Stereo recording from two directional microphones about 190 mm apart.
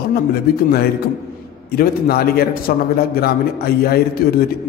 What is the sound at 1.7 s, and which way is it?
A man's voice, 55° left (ahead or behind).